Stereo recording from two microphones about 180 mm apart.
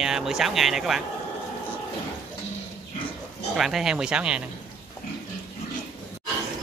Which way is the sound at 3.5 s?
Centre (ahead or behind).